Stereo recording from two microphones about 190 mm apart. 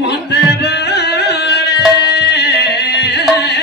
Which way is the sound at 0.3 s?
60° left (ahead or behind).